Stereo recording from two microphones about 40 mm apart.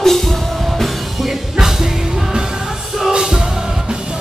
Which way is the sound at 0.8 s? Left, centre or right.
Centre.